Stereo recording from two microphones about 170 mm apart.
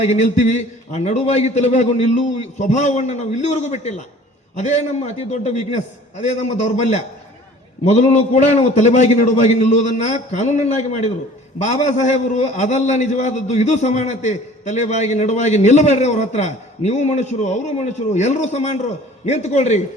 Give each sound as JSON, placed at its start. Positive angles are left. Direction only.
{"t": 0.1, "sound": "a man's voice", "side_deg": 40}
{"t": 8.3, "sound": "a man's voice", "side_deg": 45}